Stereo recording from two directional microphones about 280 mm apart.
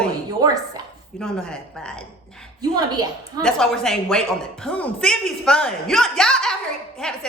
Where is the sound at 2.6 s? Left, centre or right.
Centre.